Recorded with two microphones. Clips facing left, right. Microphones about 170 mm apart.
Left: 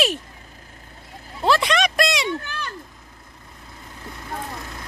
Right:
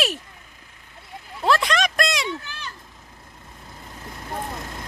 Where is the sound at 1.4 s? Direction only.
Centre (ahead or behind).